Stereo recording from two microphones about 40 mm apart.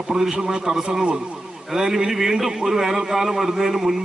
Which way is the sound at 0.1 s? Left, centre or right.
Centre.